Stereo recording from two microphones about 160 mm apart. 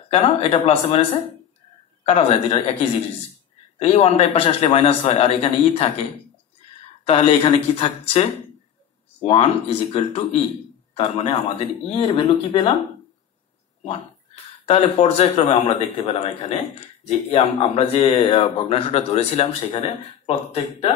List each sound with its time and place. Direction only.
0.1 s speech: 40° left (ahead or behind)
2.0 s speech: 40° left (ahead or behind)
7.1 s speech: 40° left (ahead or behind)
13.8 s speech: 40° left (ahead or behind)